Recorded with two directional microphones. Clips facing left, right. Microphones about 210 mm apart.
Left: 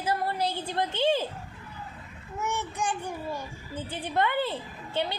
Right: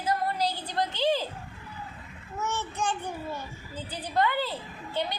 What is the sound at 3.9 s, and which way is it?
Speech, 20° left (ahead or behind).